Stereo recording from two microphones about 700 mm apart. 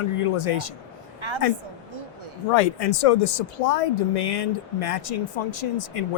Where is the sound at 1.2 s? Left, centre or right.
Right.